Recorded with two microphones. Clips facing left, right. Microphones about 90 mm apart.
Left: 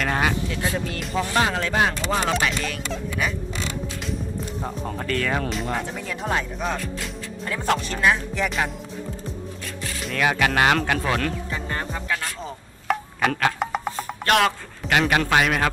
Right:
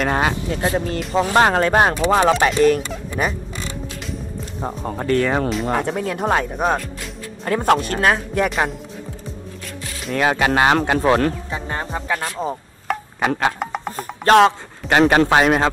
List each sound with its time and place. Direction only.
0.0 s speech: 25° right (ahead or behind)
0.5 s a man's voice: 40° right (ahead or behind)
4.6 s speech: 25° right (ahead or behind)
5.7 s speech: 55° right (ahead or behind)
10.1 s speech: 30° right (ahead or behind)
12.9 s chopping: centre (ahead or behind)
13.2 s speech: 20° right (ahead or behind)
13.6 s music: centre (ahead or behind)
14.2 s a man's voice: 30° right (ahead or behind)